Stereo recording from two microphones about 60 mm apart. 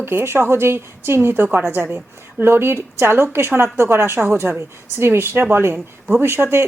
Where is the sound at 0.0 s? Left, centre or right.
Right.